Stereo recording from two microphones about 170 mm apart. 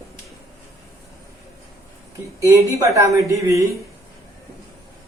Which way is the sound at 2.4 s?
20° right (ahead or behind).